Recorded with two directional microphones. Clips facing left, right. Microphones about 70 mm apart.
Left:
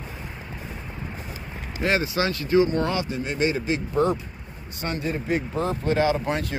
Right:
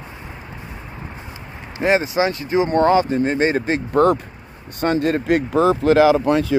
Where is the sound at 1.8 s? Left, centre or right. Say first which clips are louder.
Right 6 dB; right.